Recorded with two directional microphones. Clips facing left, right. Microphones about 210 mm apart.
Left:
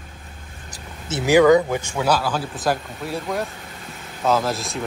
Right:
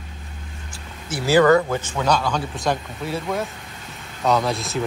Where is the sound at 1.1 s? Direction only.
15° left (ahead or behind).